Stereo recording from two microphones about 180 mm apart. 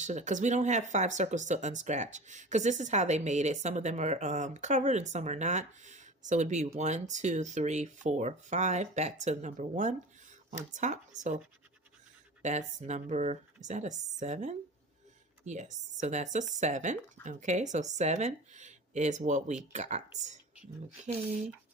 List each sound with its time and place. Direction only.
0.0 s speech: 40° right (ahead or behind)
12.4 s speech: 40° right (ahead or behind)